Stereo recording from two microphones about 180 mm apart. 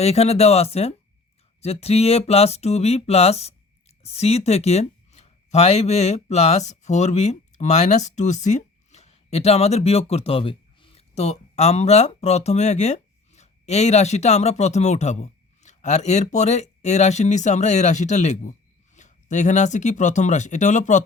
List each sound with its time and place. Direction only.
0.0 s speech: 35° left (ahead or behind)
1.6 s a sound: 35° left (ahead or behind)
18.9 s speech: 40° left (ahead or behind)